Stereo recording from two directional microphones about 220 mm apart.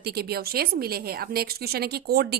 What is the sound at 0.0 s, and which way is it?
A woman's voice, 45° right (ahead or behind).